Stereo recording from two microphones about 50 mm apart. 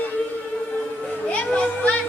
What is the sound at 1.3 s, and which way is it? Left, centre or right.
Children playing, left.